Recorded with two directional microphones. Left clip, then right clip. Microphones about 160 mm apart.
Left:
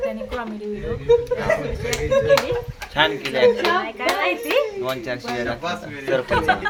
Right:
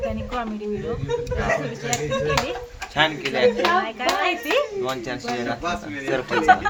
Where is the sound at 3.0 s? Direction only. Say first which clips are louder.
Left 2 dB; 10° left (ahead or behind).